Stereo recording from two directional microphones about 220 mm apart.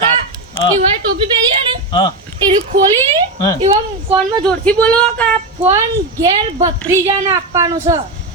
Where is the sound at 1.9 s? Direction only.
20° left (ahead or behind).